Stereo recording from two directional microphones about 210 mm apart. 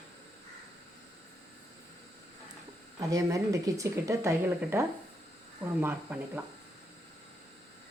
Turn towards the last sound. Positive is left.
turn(degrees=-10)  # may be behind; listen again after turning